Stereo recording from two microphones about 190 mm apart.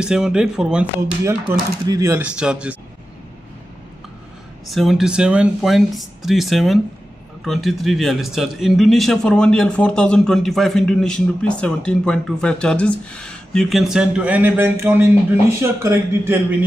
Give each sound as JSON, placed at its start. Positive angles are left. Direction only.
{"t": 0.0, "sound": "a man's voice", "side_deg": -5}
{"t": 1.5, "sound": "speech", "side_deg": -15}
{"t": 2.2, "sound": "a man's voice", "side_deg": -5}
{"t": 4.6, "sound": "a man's voice", "side_deg": 0}